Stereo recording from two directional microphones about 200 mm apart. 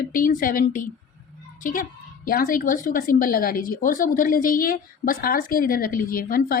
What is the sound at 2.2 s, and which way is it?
A woman's voice, 45° left (ahead or behind).